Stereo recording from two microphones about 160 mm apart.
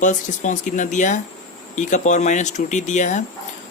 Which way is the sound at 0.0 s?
50° left (ahead or behind).